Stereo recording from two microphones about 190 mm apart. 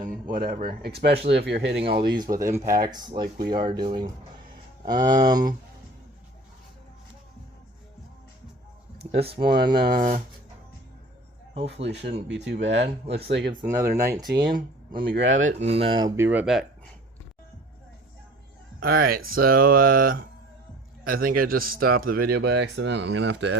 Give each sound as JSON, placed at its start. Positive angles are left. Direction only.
{"t": 0.0, "sound": "speech", "side_deg": -50}
{"t": 2.0, "sound": "speech", "side_deg": -25}
{"t": 2.6, "sound": "speech", "side_deg": -50}
{"t": 2.9, "sound": "speech", "side_deg": -25}
{"t": 4.9, "sound": "speech", "side_deg": -20}
{"t": 9.1, "sound": "speech", "side_deg": -55}
{"t": 11.6, "sound": "speech", "side_deg": -65}
{"t": 15.2, "sound": "speech", "side_deg": -75}
{"t": 15.4, "sound": "speech", "side_deg": -35}
{"t": 18.8, "sound": "speech", "side_deg": -50}